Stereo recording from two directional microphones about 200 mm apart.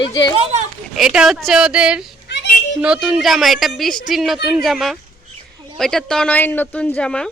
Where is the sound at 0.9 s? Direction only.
Centre (ahead or behind).